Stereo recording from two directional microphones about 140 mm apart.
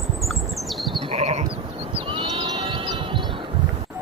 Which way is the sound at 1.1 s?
50° right (ahead or behind).